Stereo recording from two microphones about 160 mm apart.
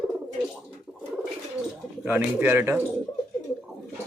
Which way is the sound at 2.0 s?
10° right (ahead or behind).